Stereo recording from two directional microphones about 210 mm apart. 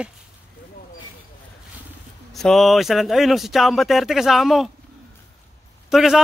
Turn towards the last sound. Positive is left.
turn(degrees=0)  # may be behind; listen again after turning